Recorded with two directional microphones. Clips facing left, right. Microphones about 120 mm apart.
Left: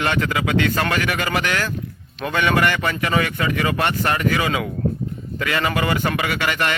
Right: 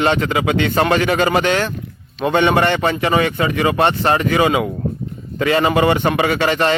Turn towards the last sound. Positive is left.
turn(degrees=-30)  # may be behind; listen again after turning